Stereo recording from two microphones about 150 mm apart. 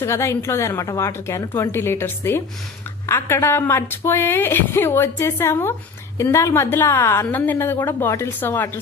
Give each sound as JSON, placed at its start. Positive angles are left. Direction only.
{"t": 0.0, "sound": "speech", "side_deg": 20}